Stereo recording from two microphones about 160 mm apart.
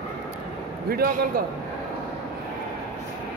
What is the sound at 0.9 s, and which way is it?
Speech, 65° right (ahead or behind).